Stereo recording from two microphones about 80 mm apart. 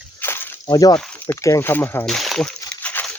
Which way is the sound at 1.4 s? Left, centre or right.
Left.